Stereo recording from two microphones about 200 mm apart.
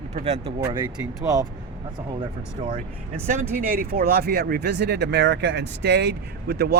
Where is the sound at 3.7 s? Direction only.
45° right (ahead or behind).